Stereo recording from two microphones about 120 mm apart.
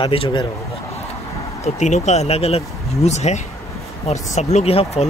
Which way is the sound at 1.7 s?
75° left (ahead or behind).